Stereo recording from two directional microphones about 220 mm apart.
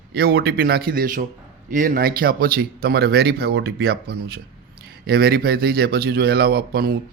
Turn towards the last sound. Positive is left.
turn(degrees=-45)  # may be behind; listen again after turning